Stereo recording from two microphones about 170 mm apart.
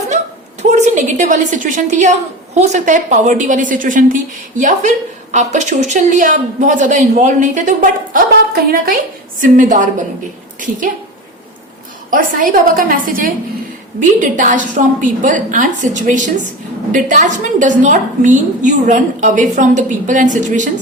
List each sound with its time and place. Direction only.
0.7 s a woman's voice: 45° right (ahead or behind); by 9.0 s 60° right (ahead or behind)
9.4 s a woman's voice: 50° right (ahead or behind)
12.1 s a woman's voice: 50° right (ahead or behind)